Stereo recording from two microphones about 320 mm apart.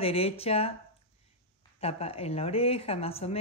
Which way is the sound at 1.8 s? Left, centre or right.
Centre.